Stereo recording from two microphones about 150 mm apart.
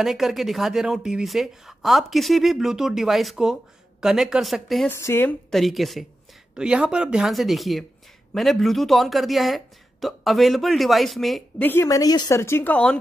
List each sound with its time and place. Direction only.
0.0 s speech: centre (ahead or behind)
4.8 s speech: 15° left (ahead or behind)
5.5 s speech: centre (ahead or behind)
11.6 s speech: 15° left (ahead or behind)